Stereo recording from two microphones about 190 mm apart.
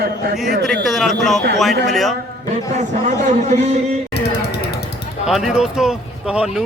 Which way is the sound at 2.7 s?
40° right (ahead or behind).